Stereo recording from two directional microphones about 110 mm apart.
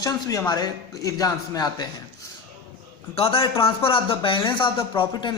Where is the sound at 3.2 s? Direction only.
60° left (ahead or behind).